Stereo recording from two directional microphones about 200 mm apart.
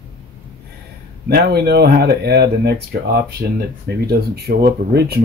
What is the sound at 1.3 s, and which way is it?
Speech, 55° right (ahead or behind).